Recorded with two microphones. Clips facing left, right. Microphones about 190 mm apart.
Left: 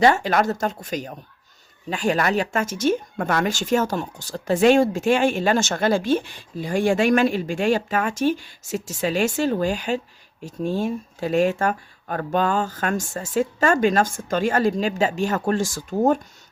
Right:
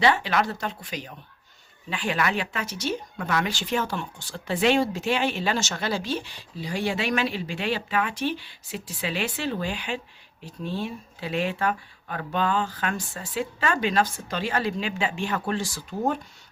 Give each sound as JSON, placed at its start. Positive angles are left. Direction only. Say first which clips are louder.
{"t": 0.0, "sound": "speech", "louder": "left 5 dB", "side_deg": 45}